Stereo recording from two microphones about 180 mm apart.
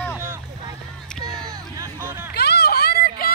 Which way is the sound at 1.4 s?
15° right (ahead or behind).